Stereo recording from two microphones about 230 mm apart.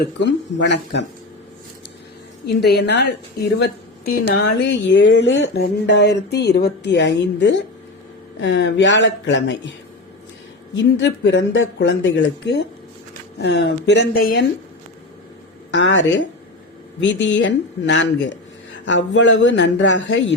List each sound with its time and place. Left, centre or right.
0.0 s speech: left
2.6 s speech: left
4.4 s speech: left
10.8 s speech: left
15.7 s speech: left